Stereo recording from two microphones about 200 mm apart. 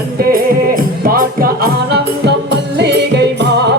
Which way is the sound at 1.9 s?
55° right (ahead or behind).